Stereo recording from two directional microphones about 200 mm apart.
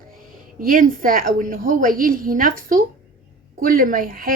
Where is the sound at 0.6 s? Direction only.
45° right (ahead or behind).